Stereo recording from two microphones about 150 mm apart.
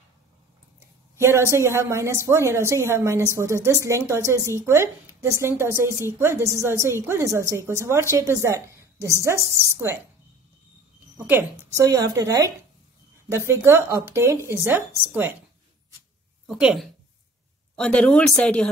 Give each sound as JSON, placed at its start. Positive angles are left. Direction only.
{"t": 1.1, "sound": "a woman's voice", "side_deg": -20}
{"t": 11.2, "sound": "a woman's voice", "side_deg": -15}
{"t": 16.4, "sound": "speech", "side_deg": -5}
{"t": 17.7, "sound": "speech", "side_deg": 5}